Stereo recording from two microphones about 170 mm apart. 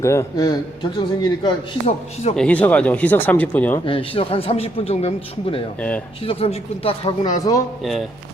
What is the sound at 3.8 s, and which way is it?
A man's voice, 30° left (ahead or behind).